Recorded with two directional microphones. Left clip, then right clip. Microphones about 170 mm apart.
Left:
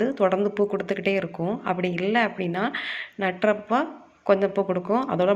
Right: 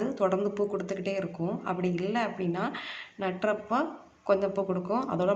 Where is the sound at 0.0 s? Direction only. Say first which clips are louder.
Left 6 dB; 25° left (ahead or behind).